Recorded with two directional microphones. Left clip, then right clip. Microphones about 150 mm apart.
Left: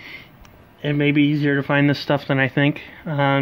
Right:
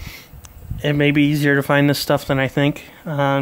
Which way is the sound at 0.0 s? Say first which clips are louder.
Left 1 dB; 30° right (ahead or behind).